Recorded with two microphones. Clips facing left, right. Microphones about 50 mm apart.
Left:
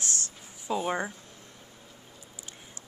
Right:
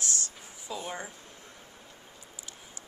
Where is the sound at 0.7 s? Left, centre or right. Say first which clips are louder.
Left 8 dB; left.